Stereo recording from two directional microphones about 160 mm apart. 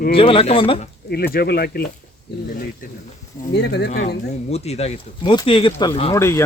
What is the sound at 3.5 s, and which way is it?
Speech, 90° left.